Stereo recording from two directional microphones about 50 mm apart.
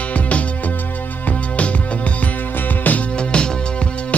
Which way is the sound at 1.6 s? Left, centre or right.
Left.